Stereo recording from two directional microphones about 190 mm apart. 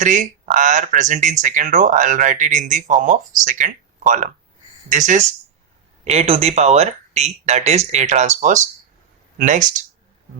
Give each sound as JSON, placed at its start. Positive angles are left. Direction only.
{"t": 0.0, "sound": "speech", "side_deg": -40}